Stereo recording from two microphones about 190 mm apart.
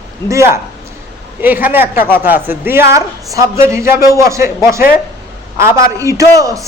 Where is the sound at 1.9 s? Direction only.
50° left (ahead or behind).